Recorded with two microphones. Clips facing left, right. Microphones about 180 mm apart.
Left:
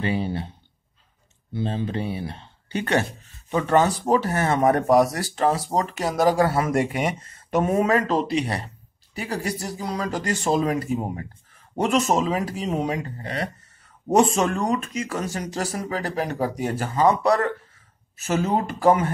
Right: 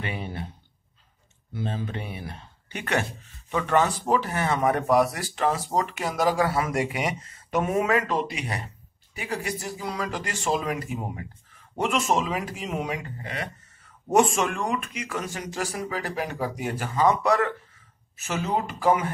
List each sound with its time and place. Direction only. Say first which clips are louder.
0.0 s a sound: left 8 dB; 30° left (ahead or behind)
1.5 s speech: left 5 dB; 30° left (ahead or behind); by 7.0 s 45° left (ahead or behind)
7.5 s speech: left 3 dB; 35° left (ahead or behind)